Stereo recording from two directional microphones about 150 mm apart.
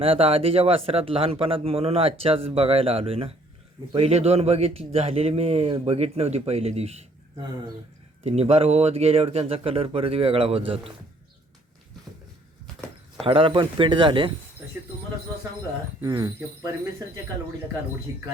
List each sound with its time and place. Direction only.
0.0 s speech: 40° right (ahead or behind)
8.3 s speech: 40° right (ahead or behind)
13.2 s speech: 35° right (ahead or behind)
16.0 s speech: 25° right (ahead or behind)
18.1 s speech: 20° right (ahead or behind)